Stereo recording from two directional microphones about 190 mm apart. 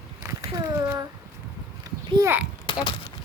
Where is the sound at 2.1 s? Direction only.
15° right (ahead or behind).